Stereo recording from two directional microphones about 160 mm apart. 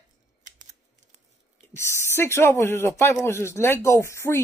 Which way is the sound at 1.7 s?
15° left (ahead or behind).